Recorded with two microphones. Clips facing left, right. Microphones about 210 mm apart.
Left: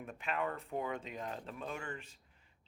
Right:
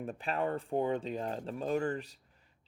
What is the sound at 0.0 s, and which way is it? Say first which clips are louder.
Speech: right 5 dB; 35° right (ahead or behind).